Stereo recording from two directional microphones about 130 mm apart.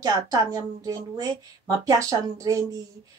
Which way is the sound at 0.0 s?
25° right (ahead or behind).